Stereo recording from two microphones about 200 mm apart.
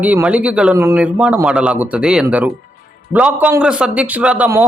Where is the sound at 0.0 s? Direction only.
10° right (ahead or behind).